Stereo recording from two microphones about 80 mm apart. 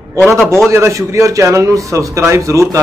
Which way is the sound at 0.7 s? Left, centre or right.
Right.